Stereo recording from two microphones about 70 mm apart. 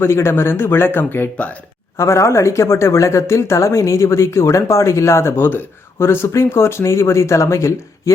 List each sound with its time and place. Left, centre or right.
0.0 s speech: left
2.0 s speech: left